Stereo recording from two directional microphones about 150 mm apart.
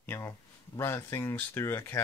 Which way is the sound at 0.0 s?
15° left (ahead or behind).